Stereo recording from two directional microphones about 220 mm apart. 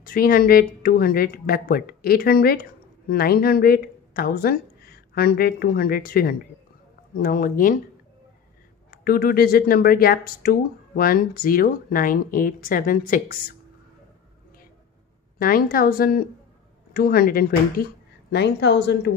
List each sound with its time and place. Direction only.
0.0 s a woman's voice: 40° left (ahead or behind)
8.9 s speech: 40° left (ahead or behind)
15.3 s a woman's voice: 40° left (ahead or behind)